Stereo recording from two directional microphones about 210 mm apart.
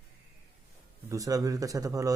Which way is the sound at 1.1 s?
15° right (ahead or behind).